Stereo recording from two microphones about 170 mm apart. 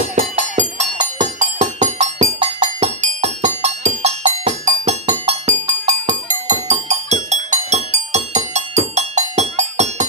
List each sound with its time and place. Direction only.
0.2 s music: 45° right (ahead or behind)